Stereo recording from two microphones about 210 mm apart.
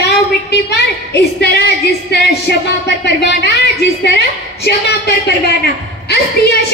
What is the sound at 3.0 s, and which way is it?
A woman's voice, 50° left (ahead or behind).